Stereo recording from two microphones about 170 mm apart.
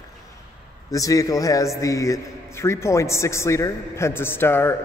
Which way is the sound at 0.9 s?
20° left (ahead or behind).